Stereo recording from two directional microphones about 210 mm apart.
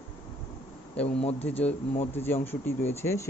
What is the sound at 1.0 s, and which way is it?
Speech, 30° left (ahead or behind).